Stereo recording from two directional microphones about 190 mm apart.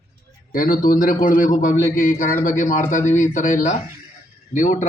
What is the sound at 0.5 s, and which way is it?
A man's voice, 45° left (ahead or behind).